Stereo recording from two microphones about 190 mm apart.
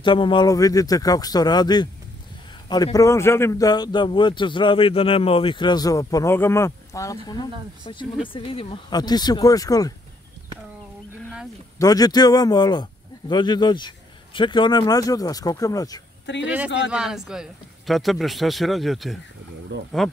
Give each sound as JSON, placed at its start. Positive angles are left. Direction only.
{"t": 0.0, "sound": "a man's voice", "side_deg": 25}
{"t": 11.8, "sound": "a man's voice", "side_deg": 20}
{"t": 16.4, "sound": "speech", "side_deg": -5}